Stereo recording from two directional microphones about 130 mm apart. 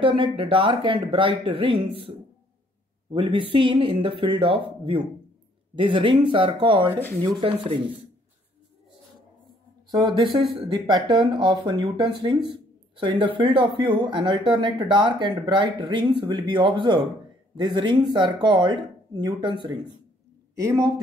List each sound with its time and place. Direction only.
0.0 s a woman's voice: 40° right (ahead or behind)
9.8 s a man's voice: 30° right (ahead or behind)